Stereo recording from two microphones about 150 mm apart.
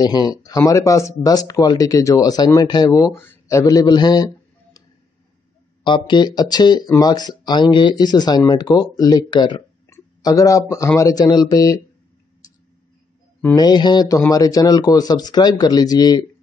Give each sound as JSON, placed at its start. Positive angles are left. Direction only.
{"t": 0.0, "sound": "speech", "side_deg": 25}
{"t": 5.9, "sound": "speech", "side_deg": 30}
{"t": 13.6, "sound": "speech", "side_deg": 30}